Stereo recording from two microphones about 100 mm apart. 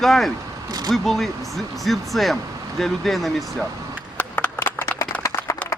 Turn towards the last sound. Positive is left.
turn(degrees=30)  # may be behind; listen again after turning